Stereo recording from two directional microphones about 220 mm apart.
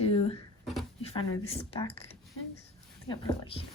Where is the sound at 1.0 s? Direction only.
25° left (ahead or behind).